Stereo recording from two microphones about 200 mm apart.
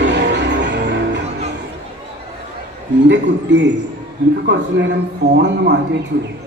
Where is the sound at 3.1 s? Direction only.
60° right (ahead or behind).